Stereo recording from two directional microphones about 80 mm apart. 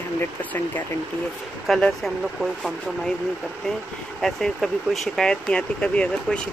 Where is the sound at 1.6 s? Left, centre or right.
Centre.